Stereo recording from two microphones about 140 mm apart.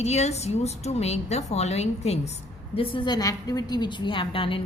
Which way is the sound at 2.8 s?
35° left (ahead or behind).